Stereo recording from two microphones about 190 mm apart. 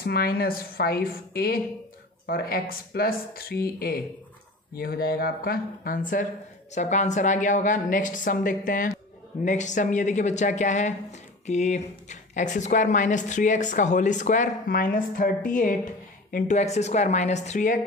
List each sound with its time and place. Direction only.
0.0 s a woman's voice: 55° left (ahead or behind)